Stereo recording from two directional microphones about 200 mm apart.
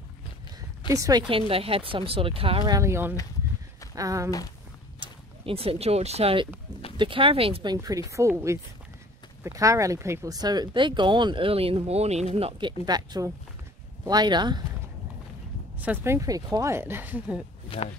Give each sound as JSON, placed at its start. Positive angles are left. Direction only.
{"t": 0.9, "sound": "speech", "side_deg": -15}
{"t": 1.5, "sound": "speech", "side_deg": -30}
{"t": 5.0, "sound": "speech", "side_deg": -30}
{"t": 15.8, "sound": "speech", "side_deg": -10}
{"t": 17.7, "sound": "a sound", "side_deg": -5}